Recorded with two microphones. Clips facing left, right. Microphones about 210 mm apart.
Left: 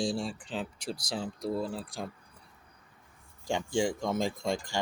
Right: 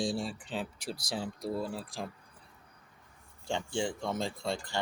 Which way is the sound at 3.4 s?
10° left (ahead or behind).